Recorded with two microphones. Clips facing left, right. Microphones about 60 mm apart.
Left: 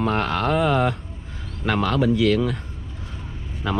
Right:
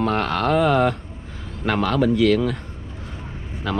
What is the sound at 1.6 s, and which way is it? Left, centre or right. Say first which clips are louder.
Speech: right 1 dB; right.